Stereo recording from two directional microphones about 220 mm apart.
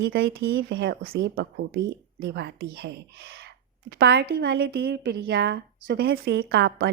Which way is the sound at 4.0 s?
50° right (ahead or behind).